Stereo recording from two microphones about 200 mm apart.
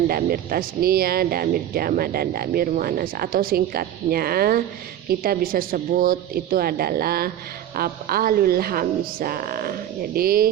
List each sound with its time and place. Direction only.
0.1 s speech: 50° right (ahead or behind)